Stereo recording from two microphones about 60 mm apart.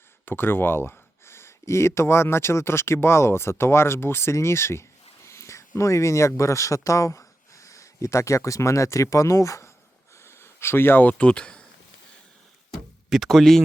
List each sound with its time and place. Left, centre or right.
0.3 s speech: left
10.2 s a sound: left
11.2 s speech: centre
13.1 s speech: centre